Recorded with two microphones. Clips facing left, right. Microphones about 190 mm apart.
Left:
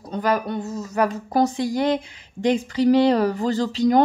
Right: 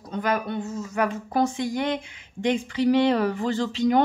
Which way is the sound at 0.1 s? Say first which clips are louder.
Left 3 dB; 35° left (ahead or behind).